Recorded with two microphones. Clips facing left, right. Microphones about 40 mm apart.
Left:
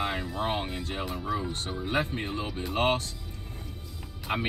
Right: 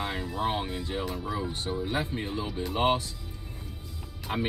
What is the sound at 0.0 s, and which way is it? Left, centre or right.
Music, centre.